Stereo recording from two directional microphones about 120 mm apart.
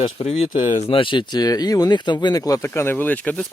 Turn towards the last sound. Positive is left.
turn(degrees=10)  # may be behind; listen again after turning